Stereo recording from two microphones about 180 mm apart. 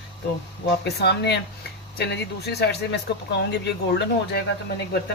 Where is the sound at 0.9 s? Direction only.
65° left (ahead or behind).